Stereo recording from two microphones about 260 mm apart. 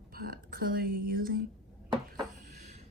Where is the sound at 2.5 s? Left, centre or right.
Right.